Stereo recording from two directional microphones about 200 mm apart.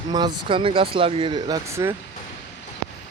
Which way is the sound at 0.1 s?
20° right (ahead or behind).